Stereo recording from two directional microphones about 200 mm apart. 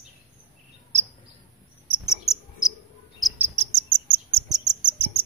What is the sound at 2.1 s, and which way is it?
Cricket, 15° left (ahead or behind).